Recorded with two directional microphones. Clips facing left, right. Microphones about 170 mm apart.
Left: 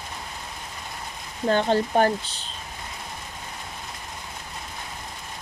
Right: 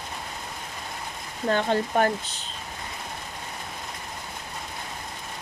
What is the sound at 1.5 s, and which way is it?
Speech, 30° left (ahead or behind).